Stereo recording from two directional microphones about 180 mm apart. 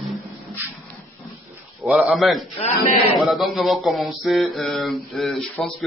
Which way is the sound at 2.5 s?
30° left (ahead or behind).